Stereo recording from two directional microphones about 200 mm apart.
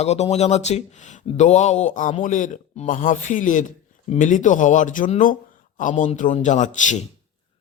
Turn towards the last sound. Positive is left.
turn(degrees=40)  # may be behind; listen again after turning